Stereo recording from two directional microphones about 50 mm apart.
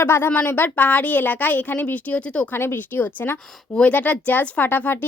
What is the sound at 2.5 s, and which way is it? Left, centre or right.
Speech, left.